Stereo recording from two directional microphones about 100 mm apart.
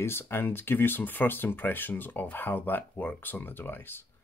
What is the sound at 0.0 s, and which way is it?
Speech, 25° left (ahead or behind).